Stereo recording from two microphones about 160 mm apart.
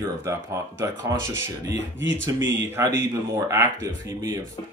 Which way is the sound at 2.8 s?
15° right (ahead or behind).